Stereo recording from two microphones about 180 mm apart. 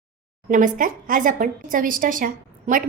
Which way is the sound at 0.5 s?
50° right (ahead or behind).